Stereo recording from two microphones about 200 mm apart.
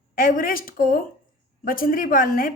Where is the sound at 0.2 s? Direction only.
45° left (ahead or behind).